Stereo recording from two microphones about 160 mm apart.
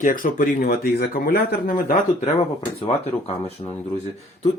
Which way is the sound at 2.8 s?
40° left (ahead or behind).